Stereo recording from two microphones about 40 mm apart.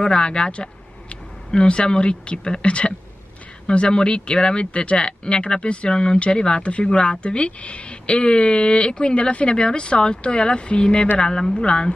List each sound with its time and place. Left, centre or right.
0.0 s speech: left